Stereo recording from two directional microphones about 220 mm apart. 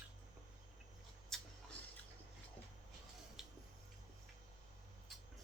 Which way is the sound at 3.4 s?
Centre (ahead or behind).